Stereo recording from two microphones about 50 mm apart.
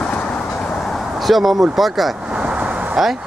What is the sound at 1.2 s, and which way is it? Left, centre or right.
Speech, centre.